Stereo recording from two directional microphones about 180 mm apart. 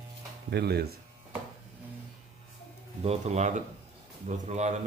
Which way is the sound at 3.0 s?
40° right (ahead or behind).